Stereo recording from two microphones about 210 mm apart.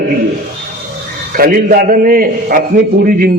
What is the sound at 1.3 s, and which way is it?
A man's voice, 40° right (ahead or behind).